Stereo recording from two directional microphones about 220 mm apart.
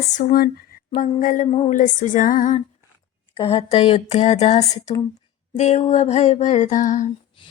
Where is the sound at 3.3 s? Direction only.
25° left (ahead or behind).